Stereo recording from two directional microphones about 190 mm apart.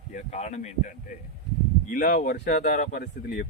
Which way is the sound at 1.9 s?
45° left (ahead or behind).